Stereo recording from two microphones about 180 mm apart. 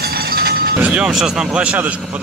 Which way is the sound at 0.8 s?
5° right (ahead or behind).